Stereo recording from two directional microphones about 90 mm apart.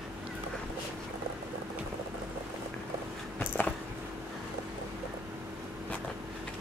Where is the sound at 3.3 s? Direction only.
20° left (ahead or behind).